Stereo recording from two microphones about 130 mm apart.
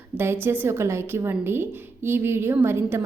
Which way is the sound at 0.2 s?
20° right (ahead or behind).